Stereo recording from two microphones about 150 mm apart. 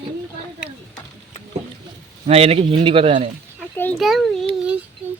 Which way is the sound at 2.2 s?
40° right (ahead or behind).